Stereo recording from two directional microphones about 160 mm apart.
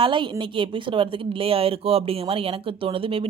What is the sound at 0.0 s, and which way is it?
A woman's voice, 30° right (ahead or behind).